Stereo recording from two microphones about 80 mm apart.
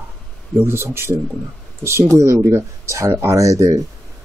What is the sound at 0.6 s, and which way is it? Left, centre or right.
Speech, right.